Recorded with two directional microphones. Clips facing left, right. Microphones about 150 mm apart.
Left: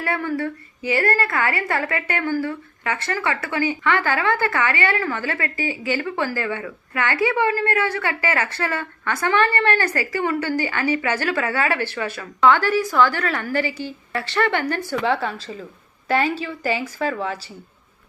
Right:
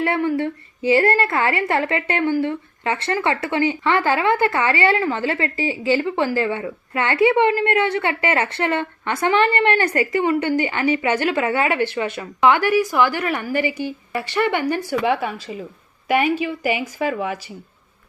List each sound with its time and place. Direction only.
0.0 s a woman's voice: 25° right (ahead or behind)